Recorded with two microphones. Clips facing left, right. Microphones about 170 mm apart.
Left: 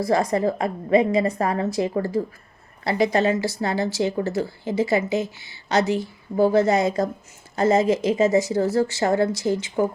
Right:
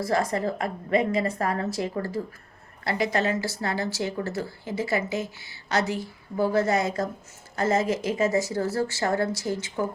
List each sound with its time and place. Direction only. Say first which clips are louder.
0.0 s speech: left 5 dB; 15° left (ahead or behind)